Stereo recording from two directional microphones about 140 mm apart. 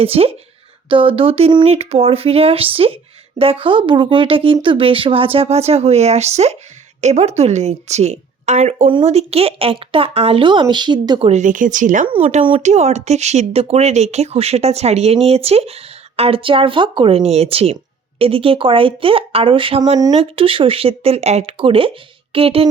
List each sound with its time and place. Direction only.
0.0 s speech: 45° right (ahead or behind)
8.9 s speech: 40° right (ahead or behind)
11.3 s speech: 60° right (ahead or behind)
12.0 s speech: 40° right (ahead or behind)